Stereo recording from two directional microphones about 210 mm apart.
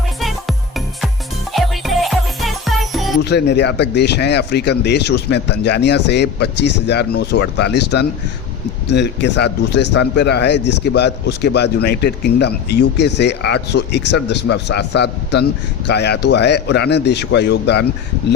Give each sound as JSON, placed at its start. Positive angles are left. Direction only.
{"t": 0.2, "sound": "music", "side_deg": 0}
{"t": 1.5, "sound": "music", "side_deg": 0}
{"t": 3.2, "sound": "speech", "side_deg": 55}